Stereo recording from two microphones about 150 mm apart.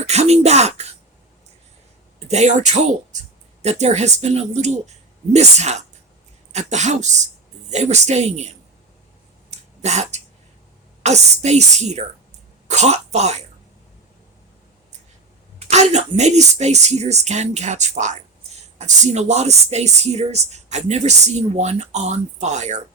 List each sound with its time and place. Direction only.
0.1 s speech: 45° right (ahead or behind)
2.1 s speech: 50° right (ahead or behind)
9.5 s a sound: 50° right (ahead or behind)
11.0 s speech: 50° right (ahead or behind)
15.7 s speech: 50° right (ahead or behind)